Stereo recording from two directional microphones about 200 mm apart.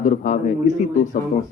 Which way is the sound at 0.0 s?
40° left (ahead or behind).